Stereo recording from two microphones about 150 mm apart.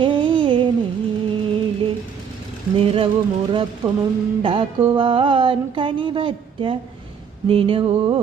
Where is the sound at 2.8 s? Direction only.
40° right (ahead or behind).